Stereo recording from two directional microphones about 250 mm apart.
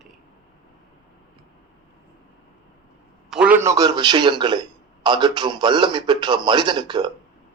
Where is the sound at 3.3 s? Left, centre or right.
Centre.